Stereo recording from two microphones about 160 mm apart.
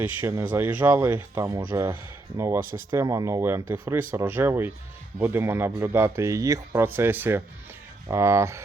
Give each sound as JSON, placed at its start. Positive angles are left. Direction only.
{"t": 0.2, "sound": "speech", "side_deg": -15}
{"t": 2.6, "sound": "speech", "side_deg": -60}
{"t": 2.9, "sound": "speech", "side_deg": -20}